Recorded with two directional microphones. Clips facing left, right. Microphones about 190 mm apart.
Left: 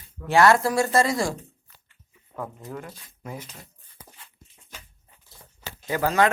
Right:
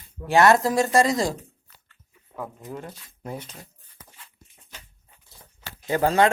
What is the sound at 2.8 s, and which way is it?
Speech, 30° right (ahead or behind).